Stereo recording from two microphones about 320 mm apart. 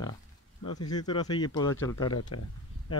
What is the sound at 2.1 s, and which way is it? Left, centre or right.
Speech, left.